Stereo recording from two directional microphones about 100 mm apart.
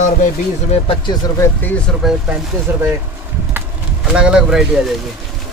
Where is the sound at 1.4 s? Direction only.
20° left (ahead or behind).